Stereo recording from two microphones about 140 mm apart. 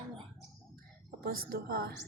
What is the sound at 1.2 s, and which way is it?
Speech, 90° right.